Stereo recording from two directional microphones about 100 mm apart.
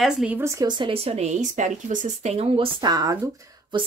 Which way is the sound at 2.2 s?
90° right.